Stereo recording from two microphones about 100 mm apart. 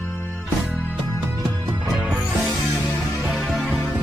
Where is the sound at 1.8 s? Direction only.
15° right (ahead or behind).